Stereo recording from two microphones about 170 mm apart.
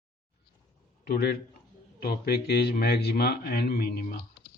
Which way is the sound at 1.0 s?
70° left (ahead or behind).